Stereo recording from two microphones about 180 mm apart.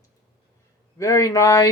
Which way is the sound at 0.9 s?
20° left (ahead or behind).